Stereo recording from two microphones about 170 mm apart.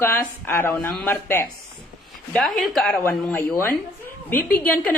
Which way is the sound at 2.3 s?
Centre (ahead or behind).